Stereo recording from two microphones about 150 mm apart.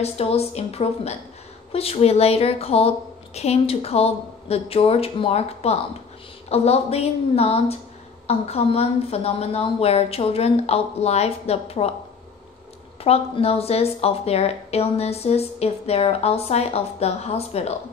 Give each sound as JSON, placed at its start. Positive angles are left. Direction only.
{"t": 0.0, "sound": "a woman's voice", "side_deg": 45}
{"t": 13.0, "sound": "speech", "side_deg": 40}